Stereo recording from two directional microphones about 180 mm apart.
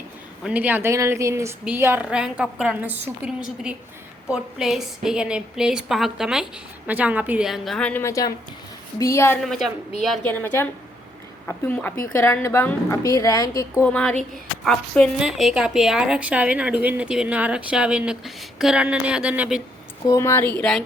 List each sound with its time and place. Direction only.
0.4 s a woman's voice: 10° right (ahead or behind); by 9.4 s 15° left (ahead or behind)
9.4 s a woman's voice: centre (ahead or behind)
10.2 s a woman's voice: 10° left (ahead or behind)
13.9 s a woman's voice: 5° left (ahead or behind)
20.1 s a woman's voice: 15° left (ahead or behind)
20.6 s a woman's voice: centre (ahead or behind)